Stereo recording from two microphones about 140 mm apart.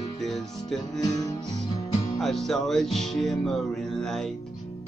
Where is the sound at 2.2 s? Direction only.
Centre (ahead or behind).